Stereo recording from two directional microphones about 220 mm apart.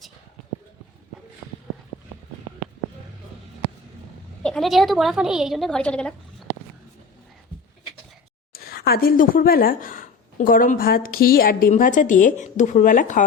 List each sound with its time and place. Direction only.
4.4 s a woman's voice: centre (ahead or behind)
8.5 s speech: 45° left (ahead or behind)